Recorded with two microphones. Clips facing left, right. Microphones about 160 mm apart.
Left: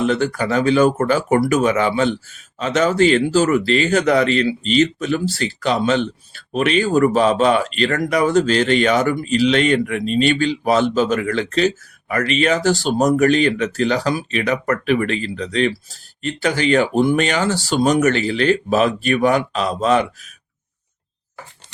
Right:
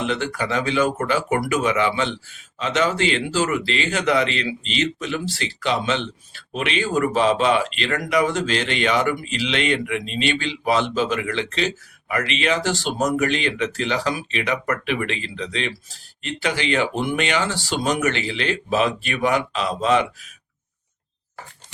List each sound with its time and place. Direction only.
0.0 s speech: 45° left (ahead or behind)